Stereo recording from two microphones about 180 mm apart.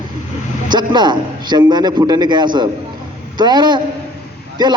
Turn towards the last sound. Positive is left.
turn(degrees=-25)  # may be behind; listen again after turning